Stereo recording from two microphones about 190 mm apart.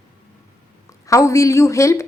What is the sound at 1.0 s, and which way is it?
A woman's voice, 15° left (ahead or behind).